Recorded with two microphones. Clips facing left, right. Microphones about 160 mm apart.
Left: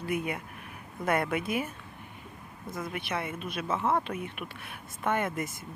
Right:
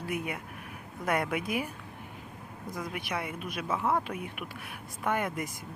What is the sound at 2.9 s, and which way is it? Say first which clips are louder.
Speech: left 2 dB; 10° right (ahead or behind).